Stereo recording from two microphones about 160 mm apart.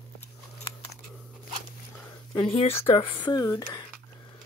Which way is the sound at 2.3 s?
35° left (ahead or behind).